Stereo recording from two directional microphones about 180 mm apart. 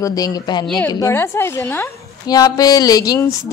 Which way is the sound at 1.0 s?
15° left (ahead or behind).